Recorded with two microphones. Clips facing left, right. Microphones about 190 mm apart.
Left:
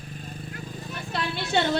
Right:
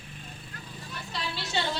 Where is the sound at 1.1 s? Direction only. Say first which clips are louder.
Left 7 dB; 55° left (ahead or behind).